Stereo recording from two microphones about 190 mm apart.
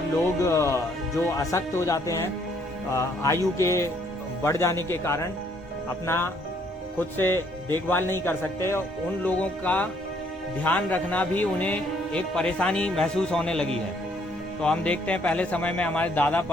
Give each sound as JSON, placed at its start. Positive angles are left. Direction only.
{"t": 0.4, "sound": "a man's voice", "side_deg": 15}